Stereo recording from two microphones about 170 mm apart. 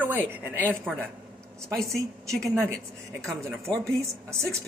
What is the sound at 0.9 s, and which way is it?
Speech, centre (ahead or behind).